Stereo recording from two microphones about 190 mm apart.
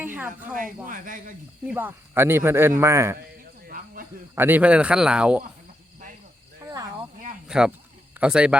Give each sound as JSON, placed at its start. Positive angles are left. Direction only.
{"t": 0.0, "sound": "a sound", "side_deg": -10}
{"t": 0.9, "sound": "speech", "side_deg": -45}
{"t": 1.6, "sound": "speech", "side_deg": -10}
{"t": 3.7, "sound": "cricket", "side_deg": -50}
{"t": 4.4, "sound": "speech", "side_deg": -10}
{"t": 6.7, "sound": "cricket", "side_deg": -20}
{"t": 7.4, "sound": "a sound", "side_deg": -5}
{"t": 8.2, "sound": "speech", "side_deg": -5}